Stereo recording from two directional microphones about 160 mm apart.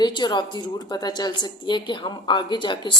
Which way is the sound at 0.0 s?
25° left (ahead or behind).